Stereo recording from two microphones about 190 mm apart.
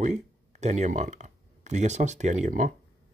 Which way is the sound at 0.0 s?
35° right (ahead or behind).